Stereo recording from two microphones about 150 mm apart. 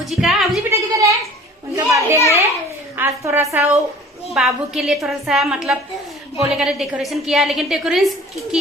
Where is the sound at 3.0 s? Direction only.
15° right (ahead or behind).